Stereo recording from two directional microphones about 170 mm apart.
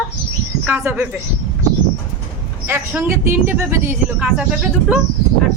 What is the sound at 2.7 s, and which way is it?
Speech, 15° right (ahead or behind).